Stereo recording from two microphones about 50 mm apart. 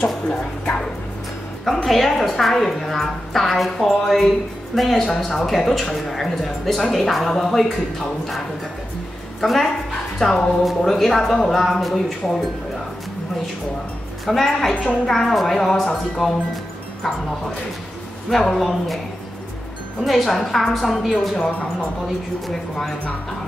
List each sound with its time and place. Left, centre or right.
0.4 s speech: left
1.6 s a woman's voice: centre
10.2 s a woman's voice: centre
14.2 s a woman's voice: centre
18.3 s a woman's voice: centre
20.0 s a woman's voice: centre
21.5 s speech: left
22.5 s speech: centre